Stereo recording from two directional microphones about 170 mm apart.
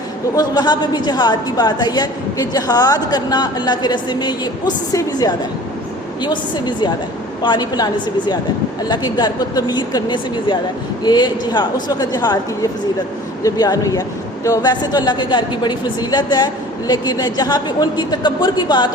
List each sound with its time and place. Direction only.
0.3 s a woman's voice: 25° left (ahead or behind)
8.9 s a woman's voice: 25° left (ahead or behind)
13.4 s a woman's voice: 20° left (ahead or behind)